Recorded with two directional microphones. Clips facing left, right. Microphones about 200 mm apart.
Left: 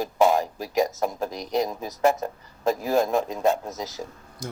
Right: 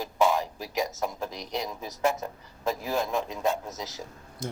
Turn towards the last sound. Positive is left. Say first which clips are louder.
# even
turn(degrees=-25)  # may be behind; listen again after turning